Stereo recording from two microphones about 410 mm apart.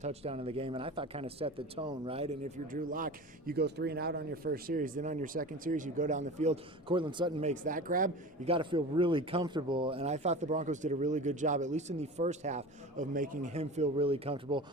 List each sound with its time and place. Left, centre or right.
0.0 s speech: centre